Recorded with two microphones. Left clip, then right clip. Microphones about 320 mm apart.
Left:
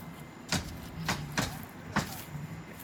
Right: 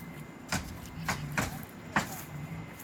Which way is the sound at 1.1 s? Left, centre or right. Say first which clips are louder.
Even; right.